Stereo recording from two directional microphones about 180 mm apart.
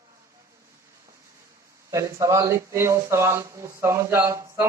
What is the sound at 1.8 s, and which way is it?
Speech, 15° right (ahead or behind).